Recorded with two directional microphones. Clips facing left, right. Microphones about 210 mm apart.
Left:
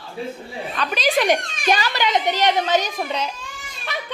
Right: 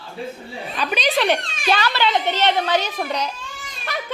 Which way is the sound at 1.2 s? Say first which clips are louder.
Left 1 dB; 15° left (ahead or behind).